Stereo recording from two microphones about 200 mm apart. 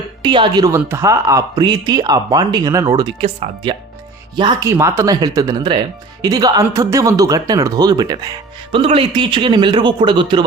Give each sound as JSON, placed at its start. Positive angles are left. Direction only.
{"t": 0.2, "sound": "speech", "side_deg": -20}